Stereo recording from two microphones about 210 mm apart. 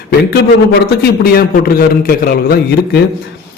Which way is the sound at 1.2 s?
45° left (ahead or behind).